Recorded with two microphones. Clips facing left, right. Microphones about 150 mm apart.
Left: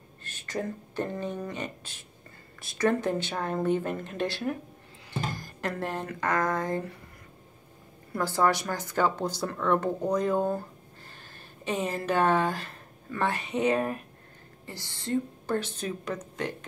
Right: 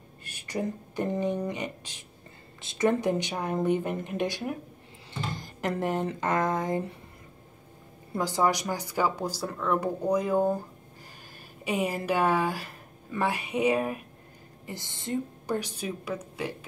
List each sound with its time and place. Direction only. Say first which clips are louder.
0.2 s speech: right 1 dB; 10° right (ahead or behind)
5.3 s a sound: right 2 dB; 20° right (ahead or behind)
6.0 s speech: right 1 dB; 20° right (ahead or behind)
8.1 s speech: even; 15° right (ahead or behind)
11.6 s speech: right 1 dB; 10° right (ahead or behind)
14.7 s speech: left 2 dB; 20° right (ahead or behind)